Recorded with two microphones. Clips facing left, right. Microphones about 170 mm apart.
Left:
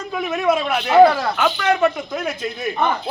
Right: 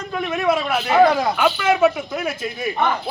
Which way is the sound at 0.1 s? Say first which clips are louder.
Left 1 dB; 5° left (ahead or behind).